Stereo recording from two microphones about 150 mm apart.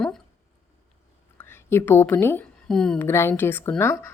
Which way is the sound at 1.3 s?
15° left (ahead or behind).